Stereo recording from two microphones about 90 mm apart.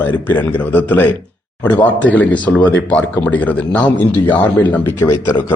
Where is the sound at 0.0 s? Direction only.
20° left (ahead or behind).